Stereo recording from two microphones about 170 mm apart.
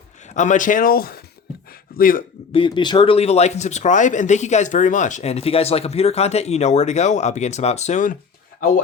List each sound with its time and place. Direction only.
0.3 s a man's voice: 45° left (ahead or behind)
2.5 s speech: 30° left (ahead or behind)